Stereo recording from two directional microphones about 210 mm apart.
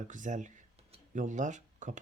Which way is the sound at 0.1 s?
35° right (ahead or behind).